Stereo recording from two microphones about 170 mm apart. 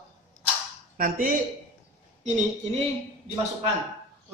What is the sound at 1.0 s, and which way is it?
Speech, 55° right (ahead or behind).